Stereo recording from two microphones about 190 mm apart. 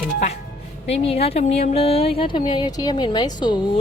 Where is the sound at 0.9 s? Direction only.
30° left (ahead or behind).